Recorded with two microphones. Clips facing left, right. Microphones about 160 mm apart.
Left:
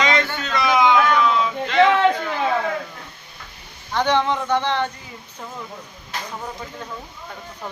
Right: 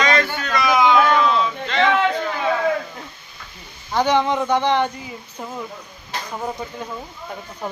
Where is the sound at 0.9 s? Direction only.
20° right (ahead or behind).